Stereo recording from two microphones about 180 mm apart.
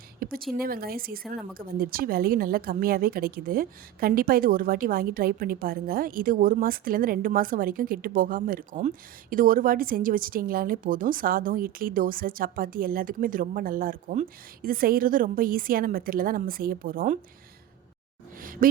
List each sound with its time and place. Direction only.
0.2 s a sound: 55° right (ahead or behind)
0.5 s a woman's voice: 55° right (ahead or behind)
18.3 s speech: 50° right (ahead or behind)